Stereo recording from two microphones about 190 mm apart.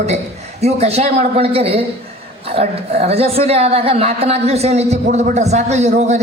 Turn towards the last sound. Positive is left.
turn(degrees=-35)  # may be behind; listen again after turning